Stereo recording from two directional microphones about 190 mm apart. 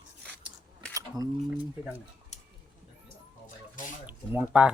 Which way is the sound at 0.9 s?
20° right (ahead or behind).